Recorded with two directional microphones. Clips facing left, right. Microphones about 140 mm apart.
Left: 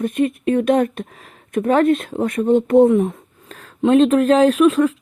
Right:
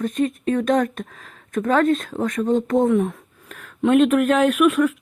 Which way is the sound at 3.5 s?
35° left (ahead or behind).